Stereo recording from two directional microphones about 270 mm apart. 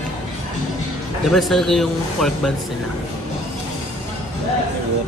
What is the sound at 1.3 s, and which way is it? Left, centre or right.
Speech, centre.